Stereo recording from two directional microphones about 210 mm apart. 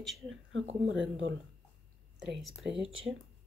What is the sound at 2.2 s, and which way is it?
Speech, centre (ahead or behind).